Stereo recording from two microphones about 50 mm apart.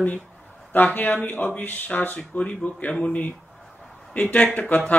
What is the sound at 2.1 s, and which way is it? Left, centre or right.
Speech, left.